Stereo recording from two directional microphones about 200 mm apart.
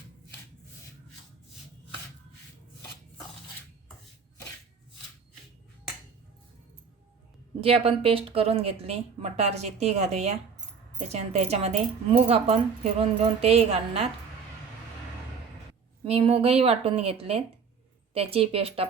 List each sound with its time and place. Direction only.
7.6 s speech: 30° right (ahead or behind)
16.0 s speech: 30° right (ahead or behind)